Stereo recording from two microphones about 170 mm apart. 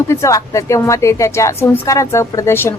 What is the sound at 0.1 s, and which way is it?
A woman's voice, 15° left (ahead or behind).